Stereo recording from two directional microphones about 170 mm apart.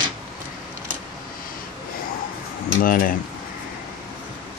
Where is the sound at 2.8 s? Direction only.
55° left (ahead or behind).